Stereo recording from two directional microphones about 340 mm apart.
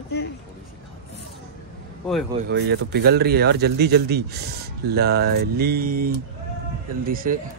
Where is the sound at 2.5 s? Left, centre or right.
Right.